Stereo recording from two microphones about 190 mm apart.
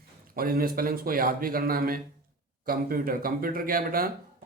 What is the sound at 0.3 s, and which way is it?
Speech, 50° right (ahead or behind).